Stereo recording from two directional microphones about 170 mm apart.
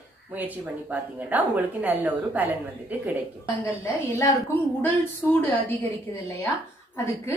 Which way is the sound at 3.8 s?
15° left (ahead or behind).